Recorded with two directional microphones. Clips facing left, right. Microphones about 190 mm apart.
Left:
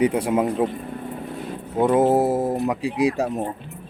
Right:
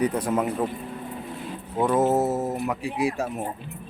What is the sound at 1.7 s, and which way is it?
Speech, 20° left (ahead or behind).